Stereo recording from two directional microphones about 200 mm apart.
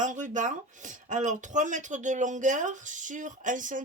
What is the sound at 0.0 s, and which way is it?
Speech, 40° right (ahead or behind).